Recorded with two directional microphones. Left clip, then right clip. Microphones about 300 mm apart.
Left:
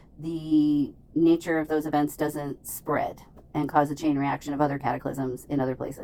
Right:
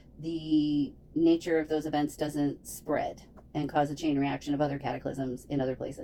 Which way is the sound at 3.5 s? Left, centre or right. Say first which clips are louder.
Left 5 dB; left.